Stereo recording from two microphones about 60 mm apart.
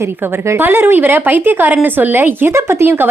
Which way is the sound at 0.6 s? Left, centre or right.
Right.